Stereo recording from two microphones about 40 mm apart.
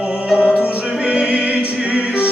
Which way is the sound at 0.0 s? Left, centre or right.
Right.